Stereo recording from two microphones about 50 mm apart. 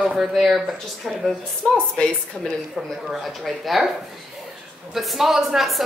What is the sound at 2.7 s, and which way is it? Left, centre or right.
A woman's voice, centre.